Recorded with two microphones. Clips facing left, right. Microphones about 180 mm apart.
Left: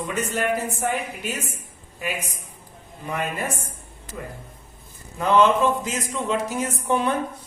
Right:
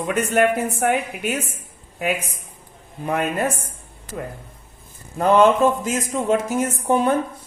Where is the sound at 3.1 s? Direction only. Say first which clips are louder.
Right 6 dB; 55° right (ahead or behind).